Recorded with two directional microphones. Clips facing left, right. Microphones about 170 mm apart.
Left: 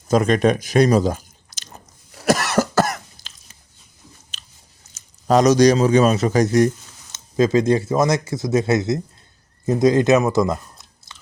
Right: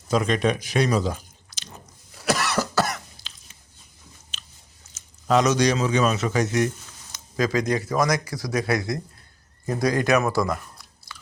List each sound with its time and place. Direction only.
0.1 s speech: 45° left (ahead or behind)
2.2 s cough: 45° left (ahead or behind)
4.3 s biting: 40° left (ahead or behind)
4.9 s a man's voice: 40° left (ahead or behind)
7.1 s speech: 25° left (ahead or behind)